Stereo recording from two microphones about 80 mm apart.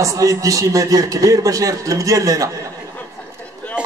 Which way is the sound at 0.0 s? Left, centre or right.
Right.